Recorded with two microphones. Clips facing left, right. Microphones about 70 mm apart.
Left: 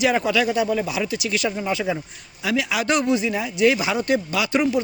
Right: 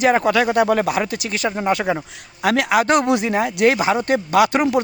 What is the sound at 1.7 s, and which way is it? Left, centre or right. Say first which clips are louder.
Speech: right 5 dB; right.